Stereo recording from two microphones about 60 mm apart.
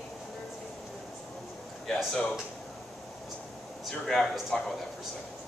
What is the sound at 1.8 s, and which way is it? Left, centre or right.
Speech, centre.